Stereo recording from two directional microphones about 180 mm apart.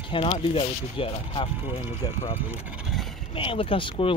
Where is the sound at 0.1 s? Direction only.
30° left (ahead or behind).